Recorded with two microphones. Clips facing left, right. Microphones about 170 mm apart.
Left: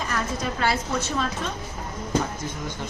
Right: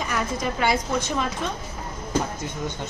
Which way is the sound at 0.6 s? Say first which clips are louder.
Right 2 dB; 15° right (ahead or behind).